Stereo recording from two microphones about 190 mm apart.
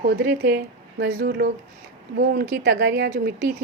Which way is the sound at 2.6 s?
65° right (ahead or behind).